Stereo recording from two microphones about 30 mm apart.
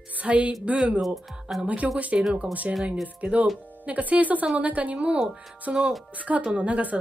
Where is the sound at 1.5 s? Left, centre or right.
Centre.